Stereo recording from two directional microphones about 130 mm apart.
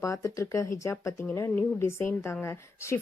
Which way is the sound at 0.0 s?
25° left (ahead or behind).